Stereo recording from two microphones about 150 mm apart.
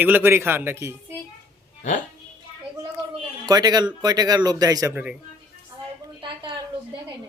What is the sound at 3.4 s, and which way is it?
A man's voice, 25° right (ahead or behind).